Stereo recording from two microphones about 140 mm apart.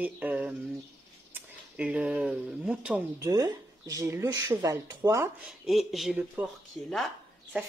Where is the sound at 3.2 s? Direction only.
25° right (ahead or behind).